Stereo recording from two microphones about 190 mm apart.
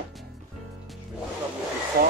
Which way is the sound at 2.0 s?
55° right (ahead or behind).